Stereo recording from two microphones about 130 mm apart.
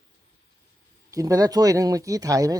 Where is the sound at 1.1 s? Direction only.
25° right (ahead or behind).